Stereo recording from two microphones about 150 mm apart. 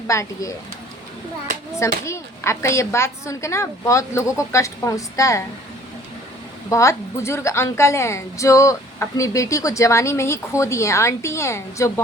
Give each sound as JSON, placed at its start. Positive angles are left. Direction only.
{"t": 0.1, "sound": "a woman's voice", "side_deg": 20}
{"t": 2.0, "sound": "a woman's voice", "side_deg": 20}
{"t": 6.7, "sound": "a woman's voice", "side_deg": 20}